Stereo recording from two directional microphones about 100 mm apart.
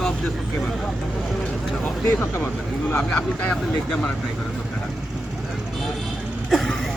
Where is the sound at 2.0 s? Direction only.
20° left (ahead or behind).